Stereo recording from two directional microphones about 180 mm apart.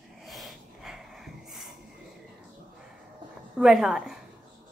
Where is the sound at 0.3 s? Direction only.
Centre (ahead or behind).